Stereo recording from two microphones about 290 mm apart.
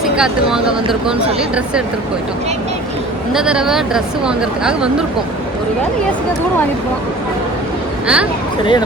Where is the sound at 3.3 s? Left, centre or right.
Centre.